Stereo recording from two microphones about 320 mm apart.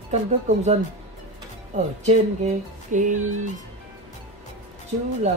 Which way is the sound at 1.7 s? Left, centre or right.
Right.